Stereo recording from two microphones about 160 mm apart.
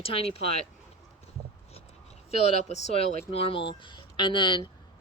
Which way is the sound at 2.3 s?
40° left (ahead or behind).